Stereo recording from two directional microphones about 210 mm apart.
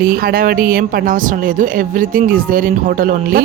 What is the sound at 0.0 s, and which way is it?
Speech, 45° right (ahead or behind).